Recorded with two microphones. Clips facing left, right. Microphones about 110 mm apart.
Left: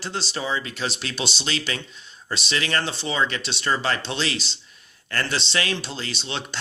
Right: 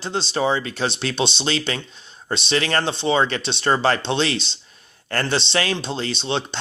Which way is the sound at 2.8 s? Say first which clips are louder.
Right 6 dB; 25° right (ahead or behind).